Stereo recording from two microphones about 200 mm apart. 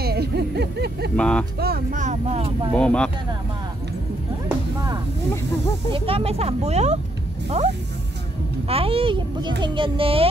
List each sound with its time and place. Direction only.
0.0 s a sound: 50° right (ahead or behind)
1.1 s speech: 5° left (ahead or behind)
1.6 s speech: 45° right (ahead or behind); by 2.7 s 30° right (ahead or behind)
2.8 s speech: 5° left (ahead or behind)
5.9 s a child's voice: 25° right (ahead or behind)